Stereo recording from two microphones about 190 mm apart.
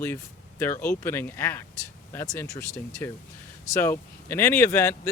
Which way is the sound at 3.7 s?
10° left (ahead or behind).